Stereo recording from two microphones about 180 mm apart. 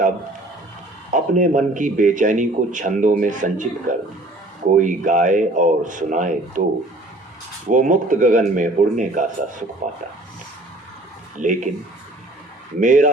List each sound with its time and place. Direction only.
1.1 s a man's voice: 45° right (ahead or behind)
7.7 s a man's voice: 45° right (ahead or behind)
11.3 s a man's voice: 45° right (ahead or behind)
12.8 s a man's voice: 45° right (ahead or behind)